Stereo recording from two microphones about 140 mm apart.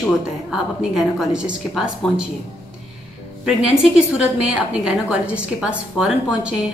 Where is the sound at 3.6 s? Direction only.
5° right (ahead or behind).